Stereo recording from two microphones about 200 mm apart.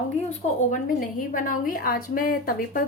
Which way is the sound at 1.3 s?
40° left (ahead or behind).